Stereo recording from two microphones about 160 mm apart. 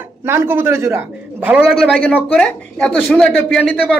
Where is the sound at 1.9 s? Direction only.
10° left (ahead or behind).